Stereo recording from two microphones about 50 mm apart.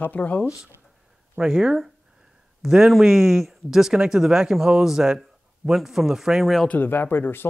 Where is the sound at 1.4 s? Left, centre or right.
Centre.